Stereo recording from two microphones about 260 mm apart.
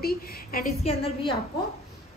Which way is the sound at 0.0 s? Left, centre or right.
Left.